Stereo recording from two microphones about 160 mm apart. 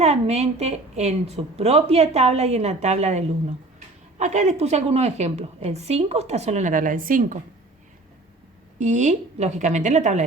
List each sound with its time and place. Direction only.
0.0 s a woman's voice: 45° right (ahead or behind)
8.8 s a woman's voice: 50° right (ahead or behind)